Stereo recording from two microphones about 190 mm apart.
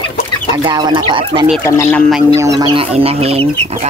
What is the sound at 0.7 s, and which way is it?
Speech, 25° right (ahead or behind).